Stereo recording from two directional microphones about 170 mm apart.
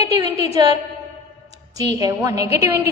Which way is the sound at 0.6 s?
25° right (ahead or behind).